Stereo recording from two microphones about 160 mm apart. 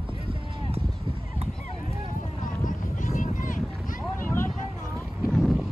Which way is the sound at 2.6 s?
55° left (ahead or behind).